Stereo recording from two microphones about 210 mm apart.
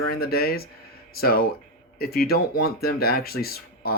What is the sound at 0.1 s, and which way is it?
Speech, 45° left (ahead or behind).